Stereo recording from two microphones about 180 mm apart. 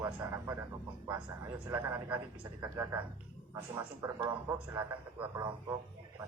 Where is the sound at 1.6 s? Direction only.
15° right (ahead or behind).